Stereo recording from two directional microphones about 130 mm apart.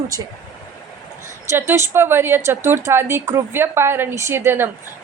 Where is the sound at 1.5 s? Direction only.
20° right (ahead or behind).